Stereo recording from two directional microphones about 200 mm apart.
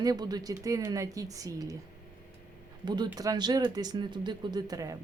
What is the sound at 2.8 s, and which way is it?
Speech, 20° right (ahead or behind).